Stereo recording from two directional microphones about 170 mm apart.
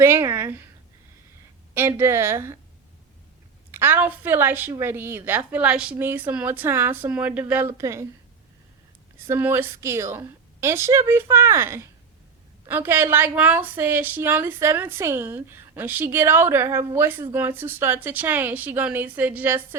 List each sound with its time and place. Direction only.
0.0 s a woman's voice: 15° right (ahead or behind)
1.7 s a woman's voice: 15° right (ahead or behind)
3.7 s a woman's voice: 15° right (ahead or behind)
9.2 s a woman's voice: 15° right (ahead or behind)